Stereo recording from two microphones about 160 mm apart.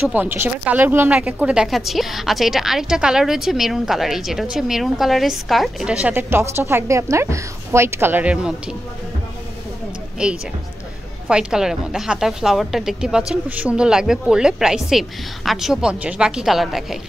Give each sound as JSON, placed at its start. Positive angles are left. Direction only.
{"t": 0.1, "sound": "a woman's voice", "side_deg": -10}
{"t": 10.1, "sound": "speech", "side_deg": -5}